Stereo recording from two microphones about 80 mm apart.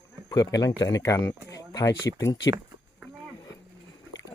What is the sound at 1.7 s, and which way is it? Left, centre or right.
Speech, left.